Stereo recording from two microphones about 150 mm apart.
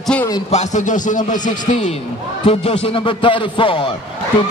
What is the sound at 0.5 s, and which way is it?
Speech, 50° left (ahead or behind).